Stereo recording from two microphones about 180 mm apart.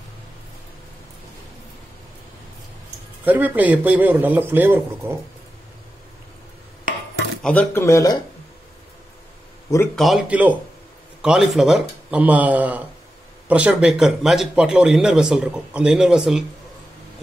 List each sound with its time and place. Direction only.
3.3 s a man's voice: 10° right (ahead or behind)
7.4 s speech: 10° left (ahead or behind)
9.9 s a man's voice: centre (ahead or behind)